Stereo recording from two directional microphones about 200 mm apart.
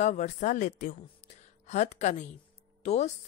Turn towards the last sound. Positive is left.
turn(degrees=35)  # may be behind; listen again after turning